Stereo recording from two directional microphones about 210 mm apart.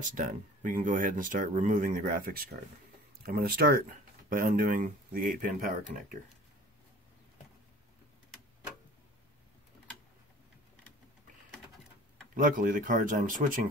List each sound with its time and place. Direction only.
0.0 s speech: 40° right (ahead or behind)
12.4 s speech: 40° right (ahead or behind)